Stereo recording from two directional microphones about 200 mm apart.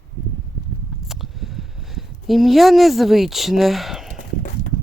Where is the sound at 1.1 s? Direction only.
Centre (ahead or behind).